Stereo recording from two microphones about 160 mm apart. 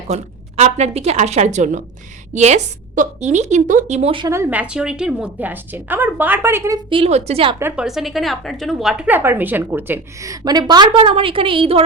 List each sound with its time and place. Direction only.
0.1 s a woman's voice: 40° right (ahead or behind)
4.3 s a woman's voice: 15° right (ahead or behind)
6.9 s a woman's voice: 40° right (ahead or behind)
7.6 s a woman's voice: 5° right (ahead or behind); by 11.8 s 35° right (ahead or behind)